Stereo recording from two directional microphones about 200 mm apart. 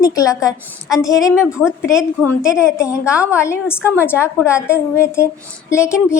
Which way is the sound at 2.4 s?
15° left (ahead or behind).